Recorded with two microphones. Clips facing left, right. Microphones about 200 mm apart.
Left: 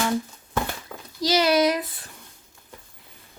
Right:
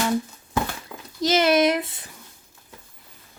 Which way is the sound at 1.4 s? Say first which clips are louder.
Right 1 dB; 25° right (ahead or behind).